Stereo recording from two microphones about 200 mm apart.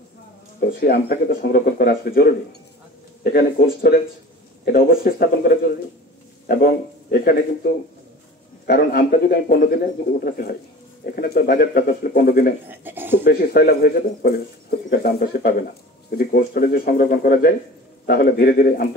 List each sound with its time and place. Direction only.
0.6 s speech: 50° left (ahead or behind)
12.6 s speech: 10° right (ahead or behind)
13.2 s speech: 50° left (ahead or behind)